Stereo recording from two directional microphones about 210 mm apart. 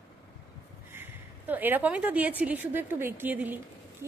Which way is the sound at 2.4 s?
10° right (ahead or behind).